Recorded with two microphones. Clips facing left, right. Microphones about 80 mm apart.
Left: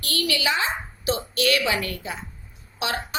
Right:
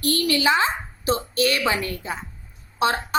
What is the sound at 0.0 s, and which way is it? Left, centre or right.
A woman's voice, right.